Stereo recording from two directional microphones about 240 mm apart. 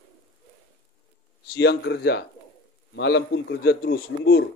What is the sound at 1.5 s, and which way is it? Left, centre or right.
A man's voice, left.